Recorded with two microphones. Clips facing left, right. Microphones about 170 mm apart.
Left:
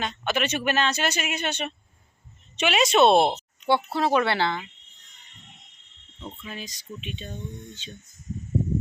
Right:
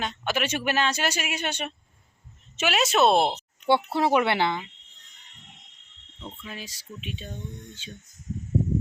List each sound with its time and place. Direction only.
0.0 s speech: 10° right (ahead or behind)
2.6 s cricket: 5° right (ahead or behind)
3.7 s speech: 20° right (ahead or behind)
6.2 s cricket: centre (ahead or behind)